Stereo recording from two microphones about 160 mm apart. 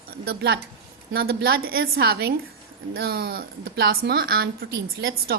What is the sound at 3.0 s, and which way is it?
A woman's voice, 70° right (ahead or behind).